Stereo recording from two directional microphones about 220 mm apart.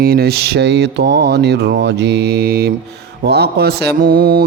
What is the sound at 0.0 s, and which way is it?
Mantra, 45° right (ahead or behind).